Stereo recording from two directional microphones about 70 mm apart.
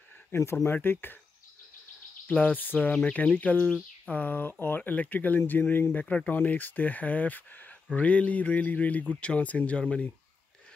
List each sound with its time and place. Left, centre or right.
0.3 s speech: left
2.2 s speech: left